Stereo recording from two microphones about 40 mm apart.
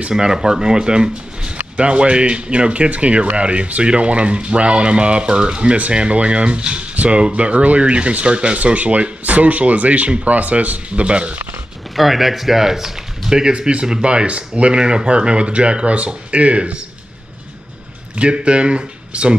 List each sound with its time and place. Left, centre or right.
0.1 s speech: centre
11.9 s speech: centre
13.5 s speech: right
18.1 s speech: right